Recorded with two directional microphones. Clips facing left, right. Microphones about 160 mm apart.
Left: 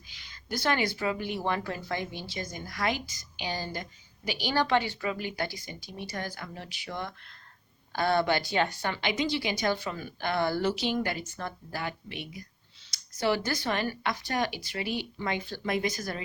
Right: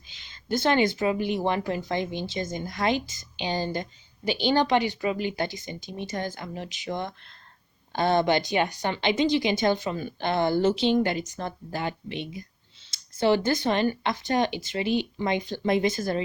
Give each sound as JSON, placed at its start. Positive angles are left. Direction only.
{"t": 0.1, "sound": "a woman's voice", "side_deg": -25}